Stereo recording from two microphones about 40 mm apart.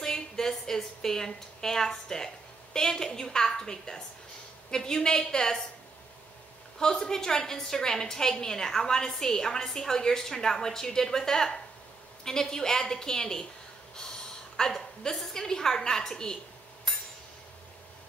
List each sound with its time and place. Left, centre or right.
0.0 s a woman's voice: centre
6.8 s a woman's voice: centre
14.7 s a woman's voice: centre